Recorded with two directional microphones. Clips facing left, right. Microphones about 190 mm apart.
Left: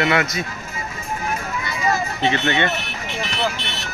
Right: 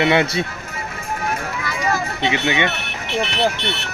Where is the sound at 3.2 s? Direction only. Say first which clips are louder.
Right 5 dB; 65° right (ahead or behind).